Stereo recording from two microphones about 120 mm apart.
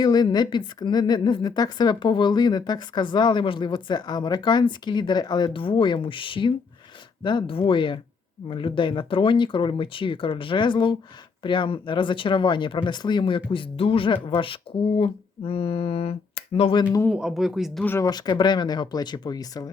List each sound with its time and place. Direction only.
0.0 s a woman's voice: 35° left (ahead or behind)
17.1 s a woman's voice: 5° right (ahead or behind)
18.0 s a woman's voice: 35° left (ahead or behind)